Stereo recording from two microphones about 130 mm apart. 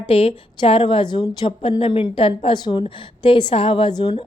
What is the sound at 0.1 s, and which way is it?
A woman's voice, 45° left (ahead or behind).